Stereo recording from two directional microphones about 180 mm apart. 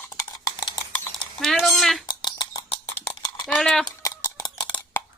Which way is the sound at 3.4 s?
5° left (ahead or behind).